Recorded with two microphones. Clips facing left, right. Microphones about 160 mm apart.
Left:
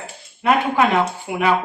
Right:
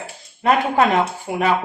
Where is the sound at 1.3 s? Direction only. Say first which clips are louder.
Right 1 dB; 35° right (ahead or behind).